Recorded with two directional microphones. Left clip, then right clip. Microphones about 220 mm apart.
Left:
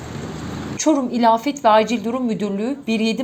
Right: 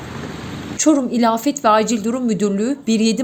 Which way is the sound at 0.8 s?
40° right (ahead or behind).